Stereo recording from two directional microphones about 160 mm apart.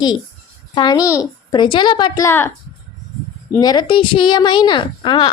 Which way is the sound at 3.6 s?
25° left (ahead or behind).